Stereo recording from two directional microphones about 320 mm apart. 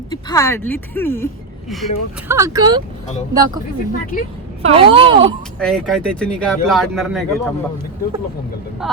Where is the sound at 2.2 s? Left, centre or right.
Centre.